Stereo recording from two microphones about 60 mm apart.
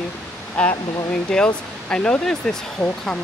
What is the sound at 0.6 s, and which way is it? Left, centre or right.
Speech, centre.